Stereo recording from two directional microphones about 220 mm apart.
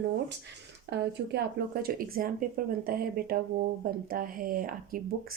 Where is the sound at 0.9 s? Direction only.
50° right (ahead or behind).